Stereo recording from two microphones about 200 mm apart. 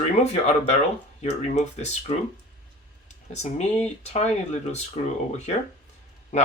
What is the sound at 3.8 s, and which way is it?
Speech, 35° left (ahead or behind).